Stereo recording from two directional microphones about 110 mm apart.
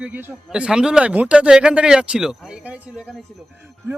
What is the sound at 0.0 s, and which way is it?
Speech, 15° right (ahead or behind).